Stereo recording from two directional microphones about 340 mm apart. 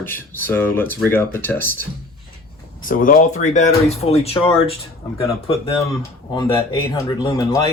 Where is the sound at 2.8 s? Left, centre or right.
Left; by 7.6 s centre.